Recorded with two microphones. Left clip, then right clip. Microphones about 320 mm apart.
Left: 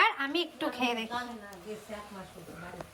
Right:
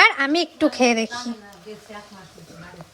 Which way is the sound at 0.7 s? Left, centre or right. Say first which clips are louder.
Right 13 dB; centre.